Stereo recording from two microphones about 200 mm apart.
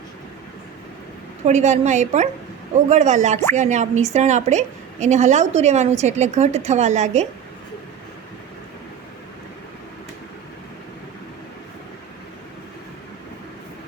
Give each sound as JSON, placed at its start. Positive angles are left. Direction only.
{"t": 1.5, "sound": "a woman's voice", "side_deg": -35}